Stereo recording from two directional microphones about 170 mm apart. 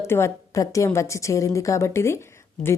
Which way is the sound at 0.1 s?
15° left (ahead or behind).